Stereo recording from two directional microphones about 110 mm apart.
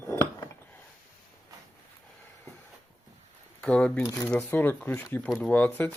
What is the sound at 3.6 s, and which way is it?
Speech, 10° left (ahead or behind).